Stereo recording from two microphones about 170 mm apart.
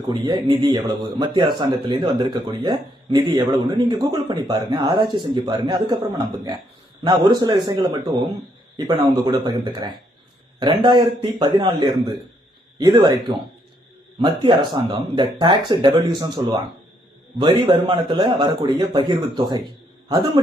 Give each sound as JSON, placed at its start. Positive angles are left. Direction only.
{"t": 0.1, "sound": "a man's voice", "side_deg": -25}
{"t": 9.2, "sound": "speech", "side_deg": -25}
{"t": 14.2, "sound": "speech", "side_deg": -30}